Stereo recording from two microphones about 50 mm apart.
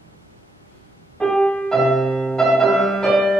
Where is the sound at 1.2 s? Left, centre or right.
Centre.